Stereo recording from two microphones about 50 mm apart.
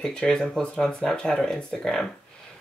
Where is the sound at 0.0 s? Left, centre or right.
Centre.